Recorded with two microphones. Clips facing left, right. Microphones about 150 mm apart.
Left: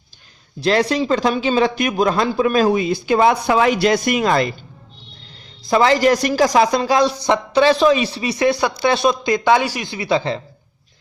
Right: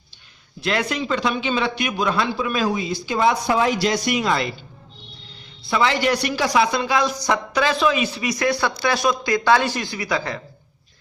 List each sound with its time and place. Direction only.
0.6 s a man's voice: 35° left (ahead or behind)
5.6 s speech: 40° left (ahead or behind); by 9.9 s 10° left (ahead or behind)
9.9 s speech: 25° left (ahead or behind)